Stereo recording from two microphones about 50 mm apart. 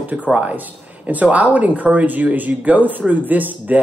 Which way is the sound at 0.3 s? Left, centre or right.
Right.